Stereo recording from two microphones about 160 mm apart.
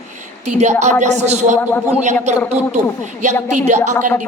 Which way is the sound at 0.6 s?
45° right (ahead or behind).